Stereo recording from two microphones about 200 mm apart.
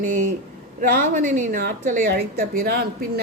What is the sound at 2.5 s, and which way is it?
Speech, 50° right (ahead or behind).